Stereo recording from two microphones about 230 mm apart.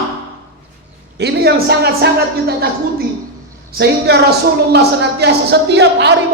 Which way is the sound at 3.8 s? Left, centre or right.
Right.